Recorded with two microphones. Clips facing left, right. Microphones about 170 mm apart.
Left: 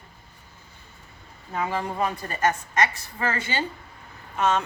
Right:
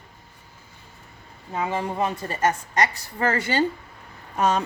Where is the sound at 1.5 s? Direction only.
20° right (ahead or behind).